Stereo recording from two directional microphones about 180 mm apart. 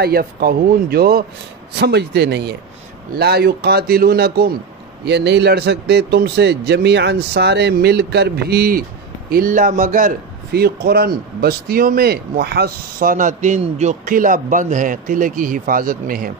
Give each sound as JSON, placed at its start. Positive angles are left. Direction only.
{"t": 0.0, "sound": "a man's voice", "side_deg": -60}
{"t": 5.0, "sound": "a man's voice", "side_deg": -70}